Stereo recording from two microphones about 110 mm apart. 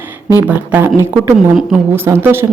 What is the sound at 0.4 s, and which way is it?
Speech, 15° right (ahead or behind).